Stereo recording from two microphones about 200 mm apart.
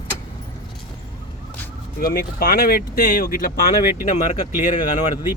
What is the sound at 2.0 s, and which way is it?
Speech, 50° left (ahead or behind).